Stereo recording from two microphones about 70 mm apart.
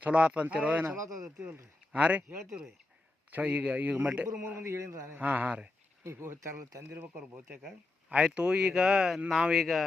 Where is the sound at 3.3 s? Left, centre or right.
Right.